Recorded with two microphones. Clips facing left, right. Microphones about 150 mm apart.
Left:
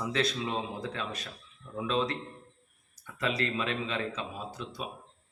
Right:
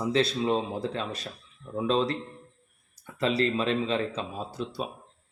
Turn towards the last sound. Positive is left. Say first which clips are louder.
# right 5 dB
turn(degrees=-35)  # may be behind; listen again after turning